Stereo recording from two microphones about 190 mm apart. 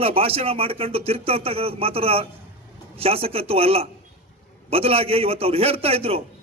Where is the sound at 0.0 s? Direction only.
30° right (ahead or behind).